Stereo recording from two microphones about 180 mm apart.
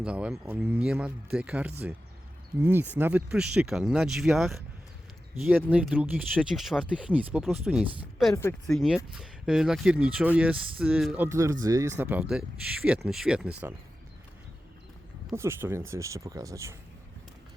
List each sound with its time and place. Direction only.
0.0 s speech: 5° right (ahead or behind)
5.7 s speech: 5° right (ahead or behind)
15.3 s speech: 15° right (ahead or behind)